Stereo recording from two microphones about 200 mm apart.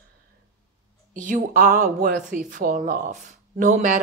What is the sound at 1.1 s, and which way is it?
Speech, 40° right (ahead or behind).